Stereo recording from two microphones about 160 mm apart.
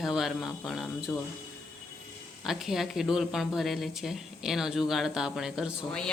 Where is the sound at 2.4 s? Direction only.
Centre (ahead or behind).